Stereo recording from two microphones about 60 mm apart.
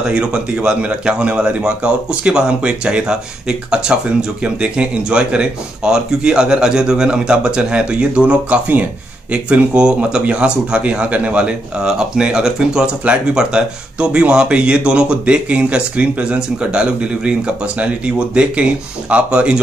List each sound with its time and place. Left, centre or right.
0.0 s speech: centre